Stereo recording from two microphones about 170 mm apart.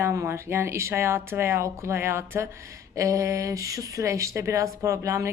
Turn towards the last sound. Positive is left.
turn(degrees=-20)  # may be behind; listen again after turning